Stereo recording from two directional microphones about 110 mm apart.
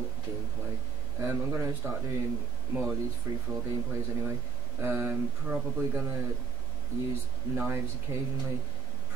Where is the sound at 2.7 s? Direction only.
10° right (ahead or behind).